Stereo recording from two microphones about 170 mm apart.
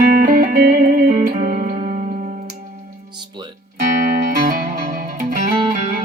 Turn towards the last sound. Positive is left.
turn(degrees=-55)  # may be behind; listen again after turning